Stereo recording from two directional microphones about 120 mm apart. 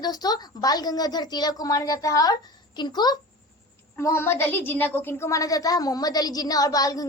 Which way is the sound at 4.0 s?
20° left (ahead or behind).